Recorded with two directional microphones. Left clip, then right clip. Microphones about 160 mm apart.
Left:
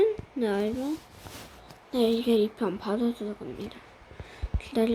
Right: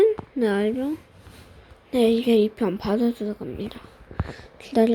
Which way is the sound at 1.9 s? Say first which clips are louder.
Right 5 dB; 30° right (ahead or behind).